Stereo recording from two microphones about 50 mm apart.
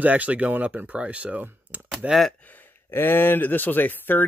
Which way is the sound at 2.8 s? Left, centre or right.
Left.